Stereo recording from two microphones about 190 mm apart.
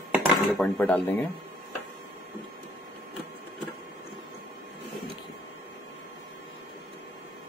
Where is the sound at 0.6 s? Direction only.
10° left (ahead or behind).